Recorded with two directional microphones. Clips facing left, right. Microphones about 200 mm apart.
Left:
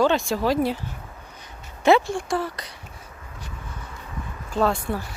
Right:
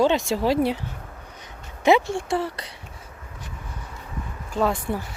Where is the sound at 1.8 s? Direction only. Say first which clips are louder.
Even; 15° right (ahead or behind).